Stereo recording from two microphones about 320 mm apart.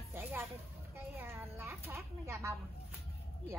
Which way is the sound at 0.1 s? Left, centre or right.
Centre.